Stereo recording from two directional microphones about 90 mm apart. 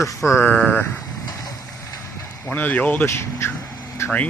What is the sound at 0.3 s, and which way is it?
Speech, 25° left (ahead or behind).